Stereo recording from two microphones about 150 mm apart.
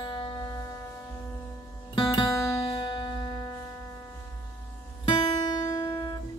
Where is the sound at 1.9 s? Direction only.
35° left (ahead or behind).